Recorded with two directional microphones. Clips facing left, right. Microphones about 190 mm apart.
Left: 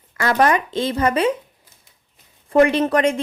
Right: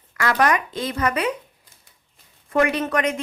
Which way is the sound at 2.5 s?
30° left (ahead or behind).